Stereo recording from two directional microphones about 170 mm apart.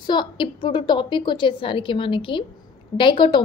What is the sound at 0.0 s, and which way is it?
A woman's voice, 25° left (ahead or behind).